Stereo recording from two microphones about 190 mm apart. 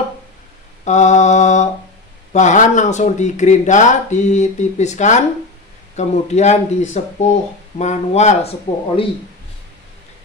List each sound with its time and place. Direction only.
0.8 s speech: 40° left (ahead or behind)